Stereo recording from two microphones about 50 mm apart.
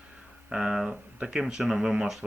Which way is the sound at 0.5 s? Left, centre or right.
Centre.